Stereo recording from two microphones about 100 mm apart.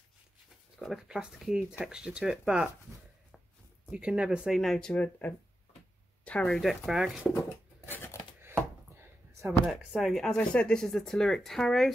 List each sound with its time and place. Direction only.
0.7 s speech: centre (ahead or behind)
3.9 s speech: 10° right (ahead or behind)
4.6 s speech: 5° left (ahead or behind)
4.9 s speech: 15° left (ahead or behind); by 7.3 s 5° right (ahead or behind)
7.9 s scissors: 25° left (ahead or behind)
9.7 s speech: centre (ahead or behind)